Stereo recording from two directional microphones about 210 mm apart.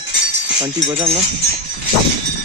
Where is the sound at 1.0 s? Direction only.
30° right (ahead or behind).